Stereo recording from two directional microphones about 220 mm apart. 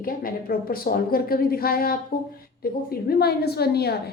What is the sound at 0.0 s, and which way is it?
A woman's voice, 40° left (ahead or behind).